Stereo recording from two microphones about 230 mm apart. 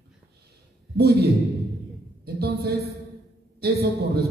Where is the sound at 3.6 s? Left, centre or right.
Right.